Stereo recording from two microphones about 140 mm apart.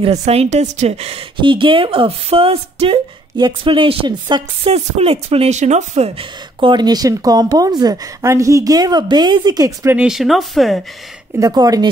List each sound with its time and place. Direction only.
0.0 s a woman's voice: 50° right (ahead or behind); by 9.7 s 30° right (ahead or behind)
9.8 s speech: 5° right (ahead or behind)
11.3 s speech: 25° right (ahead or behind)